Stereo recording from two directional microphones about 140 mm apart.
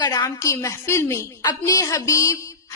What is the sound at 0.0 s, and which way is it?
A woman's voice, 25° left (ahead or behind).